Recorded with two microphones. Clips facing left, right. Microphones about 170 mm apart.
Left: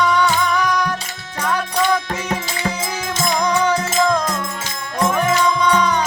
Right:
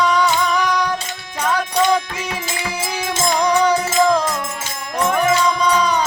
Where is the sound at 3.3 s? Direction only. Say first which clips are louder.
Right 2 dB; 10° right (ahead or behind).